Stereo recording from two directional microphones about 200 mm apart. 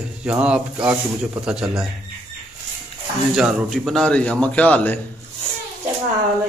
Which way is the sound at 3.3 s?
Centre (ahead or behind).